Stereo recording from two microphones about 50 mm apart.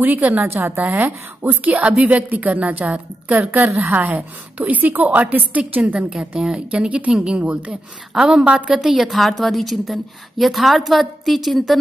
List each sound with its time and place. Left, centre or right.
0.0 s a woman's voice: right
0.4 s a woman's voice: right
3.5 s a woman's voice: right
6.7 s speech: right
8.1 s a woman's voice: centre
8.5 s speech: right
8.7 s a woman's voice: centre